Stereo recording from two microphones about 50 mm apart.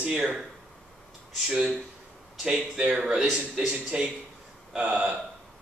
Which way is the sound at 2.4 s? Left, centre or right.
Centre.